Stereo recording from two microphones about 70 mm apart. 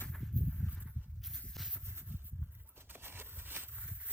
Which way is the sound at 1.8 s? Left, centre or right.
Right.